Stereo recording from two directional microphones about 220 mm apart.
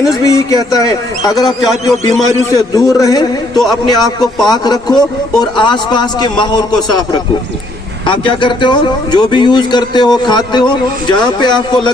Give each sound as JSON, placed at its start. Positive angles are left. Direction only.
{"t": 0.3, "sound": "a man's voice", "side_deg": 15}
{"t": 1.4, "sound": "a man's voice", "side_deg": 0}
{"t": 2.6, "sound": "a man's voice", "side_deg": 15}
{"t": 8.0, "sound": "a man's voice", "side_deg": 25}